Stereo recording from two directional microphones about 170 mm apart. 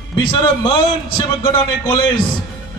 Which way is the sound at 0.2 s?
30° left (ahead or behind).